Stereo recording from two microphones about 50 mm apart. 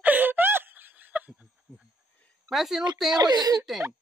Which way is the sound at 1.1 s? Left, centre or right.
Right.